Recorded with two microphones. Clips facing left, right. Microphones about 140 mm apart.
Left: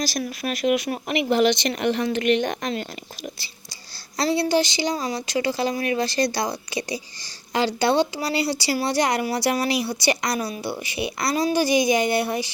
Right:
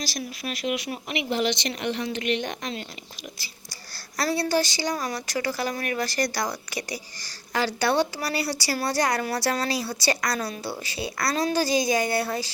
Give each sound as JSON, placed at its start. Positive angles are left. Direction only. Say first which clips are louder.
{"t": 0.0, "sound": "speech", "louder": "left 6 dB", "side_deg": 50}
{"t": 3.3, "sound": "whispering", "louder": "left 1 dB", "side_deg": 30}
{"t": 4.2, "sound": "speech", "louder": "left 3 dB", "side_deg": 25}